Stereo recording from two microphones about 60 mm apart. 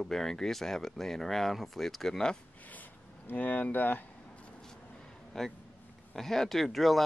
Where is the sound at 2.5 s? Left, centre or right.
Left.